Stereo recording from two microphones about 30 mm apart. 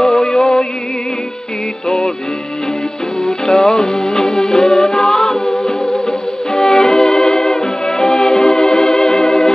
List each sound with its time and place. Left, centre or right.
0.0 s music: centre
1.9 s music: centre
3.3 s music: left